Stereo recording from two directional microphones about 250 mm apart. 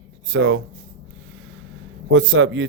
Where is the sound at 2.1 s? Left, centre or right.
Right.